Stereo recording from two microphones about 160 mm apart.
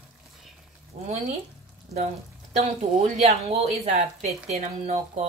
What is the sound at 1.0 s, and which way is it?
Speech, 45° right (ahead or behind).